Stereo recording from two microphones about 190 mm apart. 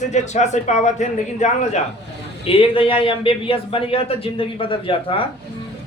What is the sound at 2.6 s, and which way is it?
A man's voice, 25° left (ahead or behind).